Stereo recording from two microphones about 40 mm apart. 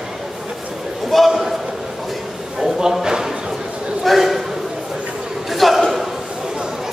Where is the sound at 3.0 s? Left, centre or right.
Centre.